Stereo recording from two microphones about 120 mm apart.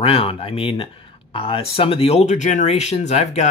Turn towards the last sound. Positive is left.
turn(degrees=70)  # may be behind; listen again after turning